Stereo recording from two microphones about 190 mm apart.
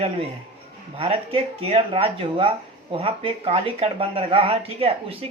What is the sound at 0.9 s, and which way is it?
Speech, 30° right (ahead or behind).